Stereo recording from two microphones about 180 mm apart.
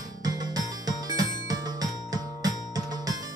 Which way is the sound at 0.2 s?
20° right (ahead or behind).